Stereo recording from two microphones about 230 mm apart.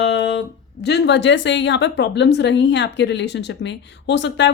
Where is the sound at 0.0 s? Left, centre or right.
Left.